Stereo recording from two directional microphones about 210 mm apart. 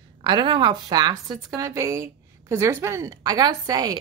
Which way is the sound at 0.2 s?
20° right (ahead or behind).